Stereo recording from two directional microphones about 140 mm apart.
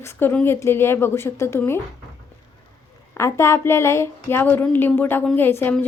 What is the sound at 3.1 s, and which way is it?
A woman's voice, 20° left (ahead or behind).